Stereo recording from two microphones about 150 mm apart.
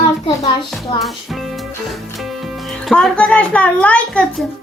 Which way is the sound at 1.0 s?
Centre (ahead or behind).